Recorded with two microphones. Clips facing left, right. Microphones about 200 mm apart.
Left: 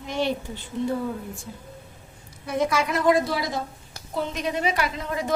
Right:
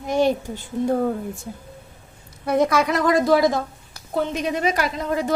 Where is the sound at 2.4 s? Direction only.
65° right (ahead or behind); by 3.3 s 90° right.